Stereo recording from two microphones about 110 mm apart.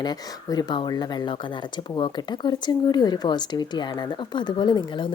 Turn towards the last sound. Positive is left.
turn(degrees=45)  # may be behind; listen again after turning